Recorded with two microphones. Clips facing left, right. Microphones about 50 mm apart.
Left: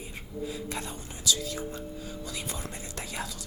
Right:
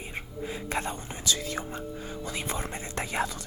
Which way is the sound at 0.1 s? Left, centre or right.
Right.